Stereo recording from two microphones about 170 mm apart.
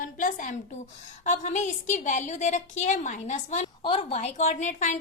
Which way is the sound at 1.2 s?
45° left (ahead or behind).